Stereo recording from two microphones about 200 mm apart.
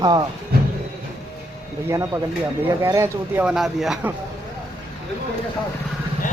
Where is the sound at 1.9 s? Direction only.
15° right (ahead or behind).